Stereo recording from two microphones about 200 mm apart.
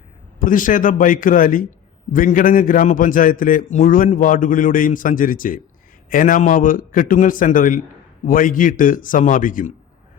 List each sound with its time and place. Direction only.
0.3 s a man's voice: 40° left (ahead or behind)